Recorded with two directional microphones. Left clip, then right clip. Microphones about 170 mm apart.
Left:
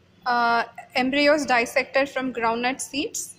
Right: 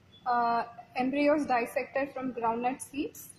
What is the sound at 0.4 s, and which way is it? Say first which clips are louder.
A woman's voice: left 9 dB; 10° left (ahead or behind).